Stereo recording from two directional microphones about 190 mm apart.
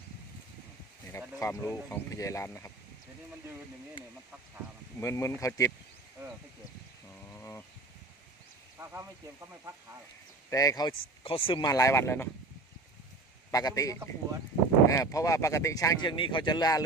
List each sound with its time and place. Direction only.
1.4 s speech: 15° left (ahead or behind)
4.9 s speech: 15° left (ahead or behind)
7.1 s a sound: 10° left (ahead or behind)
8.8 s speech: 15° right (ahead or behind)
10.5 s speech: 20° left (ahead or behind)
13.5 s speech: 20° left (ahead or behind)